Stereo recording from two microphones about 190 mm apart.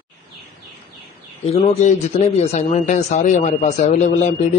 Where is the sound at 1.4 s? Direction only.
30° left (ahead or behind).